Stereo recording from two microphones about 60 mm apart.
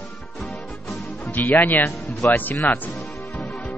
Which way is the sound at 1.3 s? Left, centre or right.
Left.